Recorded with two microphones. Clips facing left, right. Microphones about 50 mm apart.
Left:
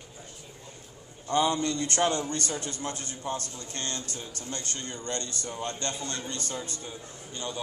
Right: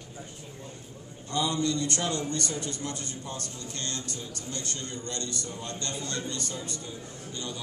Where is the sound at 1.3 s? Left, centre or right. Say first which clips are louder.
Left 2 dB; left.